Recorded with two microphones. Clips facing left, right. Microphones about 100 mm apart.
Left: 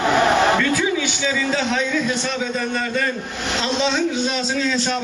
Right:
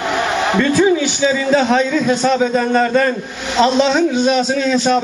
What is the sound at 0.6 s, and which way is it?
A man's voice, 35° right (ahead or behind).